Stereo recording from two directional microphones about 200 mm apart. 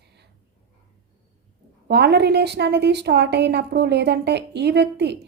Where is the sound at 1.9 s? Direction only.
55° right (ahead or behind).